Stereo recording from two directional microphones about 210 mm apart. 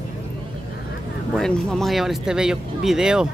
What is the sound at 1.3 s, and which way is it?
Speech, centre (ahead or behind).